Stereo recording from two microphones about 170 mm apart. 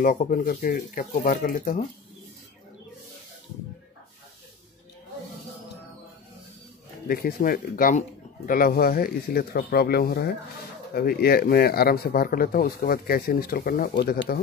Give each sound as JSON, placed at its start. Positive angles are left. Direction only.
{"t": 0.0, "sound": "speech", "side_deg": 50}
{"t": 7.1, "sound": "speech", "side_deg": 60}